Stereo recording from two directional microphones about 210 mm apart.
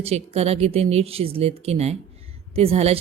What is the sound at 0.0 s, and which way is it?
A woman's voice, 30° right (ahead or behind).